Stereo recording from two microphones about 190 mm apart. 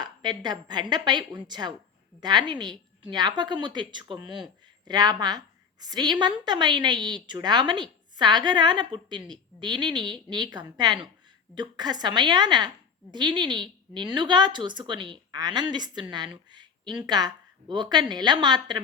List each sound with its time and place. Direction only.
0.0 s a woman's voice: 20° right (ahead or behind)